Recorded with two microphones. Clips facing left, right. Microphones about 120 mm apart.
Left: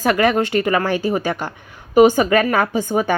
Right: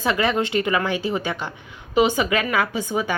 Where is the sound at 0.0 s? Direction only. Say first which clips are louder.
Left 5 dB; 50° left (ahead or behind).